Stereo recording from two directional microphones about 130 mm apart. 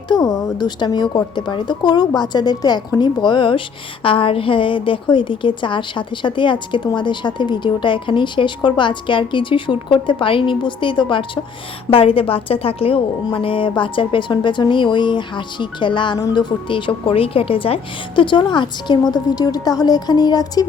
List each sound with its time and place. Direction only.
0.1 s a woman's voice: 30° left (ahead or behind)